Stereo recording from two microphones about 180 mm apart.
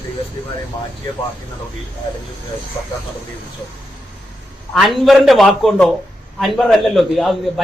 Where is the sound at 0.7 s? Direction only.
25° left (ahead or behind).